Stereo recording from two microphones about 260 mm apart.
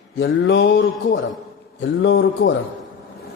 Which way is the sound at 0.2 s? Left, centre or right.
Left.